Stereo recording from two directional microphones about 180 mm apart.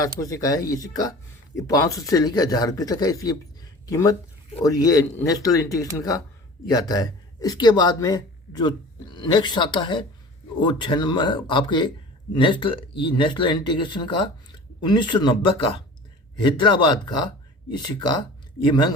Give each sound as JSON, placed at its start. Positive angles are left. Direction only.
{"t": 0.2, "sound": "speech", "side_deg": 20}